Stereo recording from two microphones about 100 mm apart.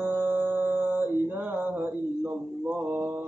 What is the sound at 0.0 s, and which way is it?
Mantra, 20° right (ahead or behind).